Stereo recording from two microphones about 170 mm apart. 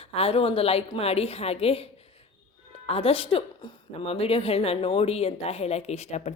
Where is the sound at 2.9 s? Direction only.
35° left (ahead or behind).